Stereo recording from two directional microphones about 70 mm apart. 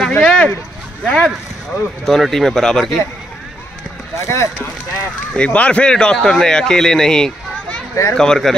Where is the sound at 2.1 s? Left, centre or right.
Centre.